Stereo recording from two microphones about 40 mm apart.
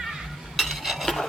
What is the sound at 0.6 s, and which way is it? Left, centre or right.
Stir, centre.